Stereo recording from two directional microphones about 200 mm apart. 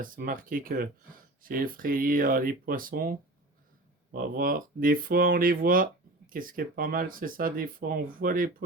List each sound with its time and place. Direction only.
0.0 s speech: 45° right (ahead or behind)